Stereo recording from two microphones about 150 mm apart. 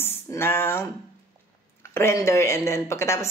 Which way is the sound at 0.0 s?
15° left (ahead or behind).